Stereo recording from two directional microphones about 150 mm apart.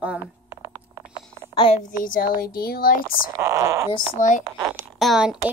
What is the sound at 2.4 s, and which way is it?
Speech, 90° left.